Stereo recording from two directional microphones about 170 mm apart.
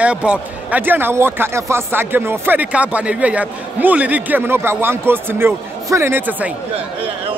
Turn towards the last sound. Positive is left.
turn(degrees=-10)  # may be behind; listen again after turning